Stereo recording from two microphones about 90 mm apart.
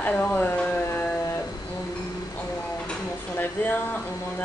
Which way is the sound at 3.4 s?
20° left (ahead or behind).